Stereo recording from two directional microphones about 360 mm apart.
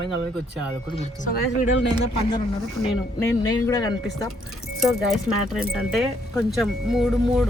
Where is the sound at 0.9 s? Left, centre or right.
Centre.